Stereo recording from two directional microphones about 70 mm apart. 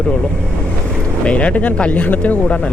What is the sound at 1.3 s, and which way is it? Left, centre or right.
Speech, centre.